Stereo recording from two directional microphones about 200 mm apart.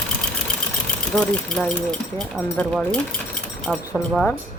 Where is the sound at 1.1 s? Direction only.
5° left (ahead or behind).